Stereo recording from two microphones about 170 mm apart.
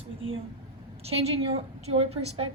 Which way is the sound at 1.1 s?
35° right (ahead or behind).